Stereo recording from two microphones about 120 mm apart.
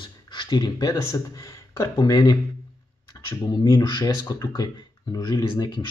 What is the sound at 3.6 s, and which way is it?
Speech, 35° left (ahead or behind).